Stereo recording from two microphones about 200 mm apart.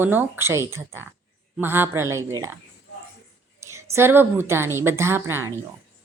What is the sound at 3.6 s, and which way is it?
Speech, 15° right (ahead or behind).